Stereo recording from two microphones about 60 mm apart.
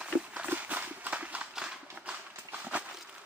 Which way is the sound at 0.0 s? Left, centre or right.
Centre.